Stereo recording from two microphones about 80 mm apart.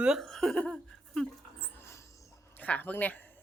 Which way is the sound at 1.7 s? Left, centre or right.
Left.